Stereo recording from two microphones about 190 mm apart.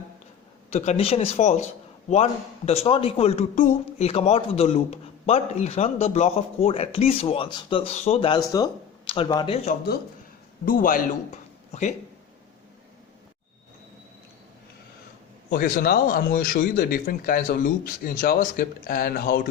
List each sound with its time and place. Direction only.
0.7 s a man's voice: 35° left (ahead or behind)
9.6 s speech: 55° left (ahead or behind)
10.7 s speech: 45° left (ahead or behind)
11.7 s speech: 35° left (ahead or behind)
15.4 s speech: 50° left (ahead or behind)